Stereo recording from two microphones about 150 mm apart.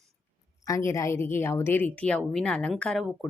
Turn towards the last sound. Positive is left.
turn(degrees=5)  # may be behind; listen again after turning